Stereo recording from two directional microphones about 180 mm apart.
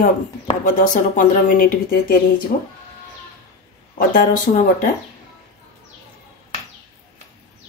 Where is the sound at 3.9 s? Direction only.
50° left (ahead or behind).